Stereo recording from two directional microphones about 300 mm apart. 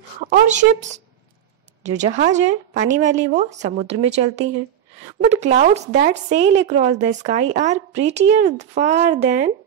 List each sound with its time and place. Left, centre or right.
0.3 s a woman's voice: right